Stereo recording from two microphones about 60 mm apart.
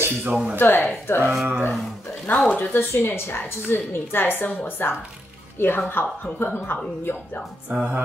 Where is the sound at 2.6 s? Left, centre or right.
Left.